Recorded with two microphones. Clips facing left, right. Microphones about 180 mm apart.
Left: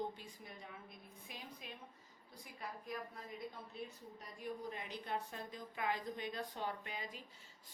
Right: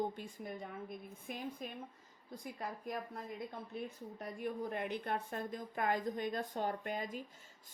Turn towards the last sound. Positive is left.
turn(degrees=-50)  # may be behind; listen again after turning